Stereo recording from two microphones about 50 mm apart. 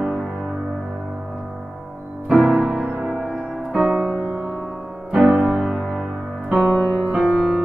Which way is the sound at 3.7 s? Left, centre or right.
Centre.